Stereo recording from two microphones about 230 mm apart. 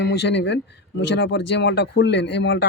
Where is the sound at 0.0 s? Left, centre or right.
Left.